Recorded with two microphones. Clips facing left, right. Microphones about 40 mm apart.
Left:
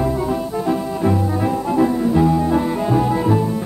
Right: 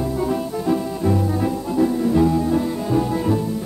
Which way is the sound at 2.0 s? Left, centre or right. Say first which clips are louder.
Left 1 dB; centre.